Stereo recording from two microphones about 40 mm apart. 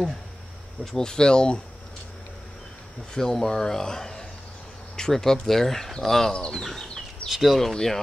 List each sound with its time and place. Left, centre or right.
0.9 s speech: centre
3.2 s speech: centre
7.2 s speech: centre
7.7 s speech: centre